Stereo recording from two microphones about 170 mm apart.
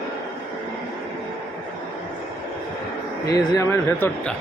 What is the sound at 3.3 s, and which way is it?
Speech, 25° left (ahead or behind).